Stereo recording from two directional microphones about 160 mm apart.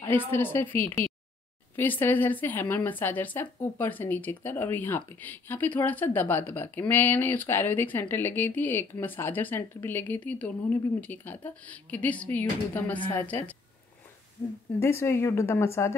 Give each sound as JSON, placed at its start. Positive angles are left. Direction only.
{"t": 0.0, "sound": "speech", "side_deg": 15}
{"t": 1.0, "sound": "a sound", "side_deg": 15}
{"t": 1.8, "sound": "speech", "side_deg": 10}
{"t": 14.8, "sound": "speech", "side_deg": 15}